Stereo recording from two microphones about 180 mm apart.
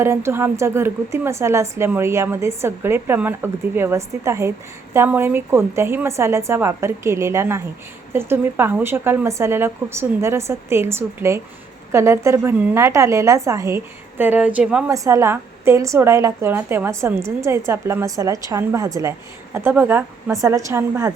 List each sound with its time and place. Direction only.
0.0 s a woman's voice: 15° right (ahead or behind)
14.8 s a woman's voice: 15° right (ahead or behind)